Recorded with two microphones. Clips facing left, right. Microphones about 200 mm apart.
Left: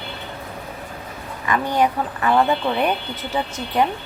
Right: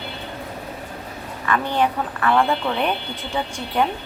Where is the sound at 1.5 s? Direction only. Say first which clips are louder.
Left 1 dB; 10° left (ahead or behind).